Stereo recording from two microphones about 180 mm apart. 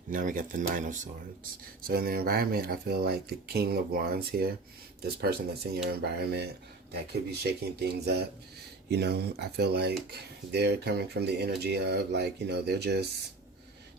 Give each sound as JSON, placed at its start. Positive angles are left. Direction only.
{"t": 0.1, "sound": "speech", "side_deg": -50}
{"t": 1.9, "sound": "speech", "side_deg": -55}